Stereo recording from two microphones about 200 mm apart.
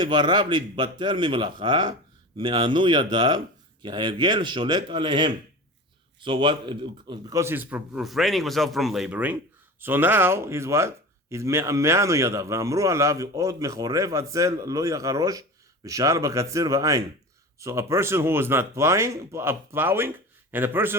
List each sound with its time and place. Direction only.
0.0 s speech: 20° right (ahead or behind)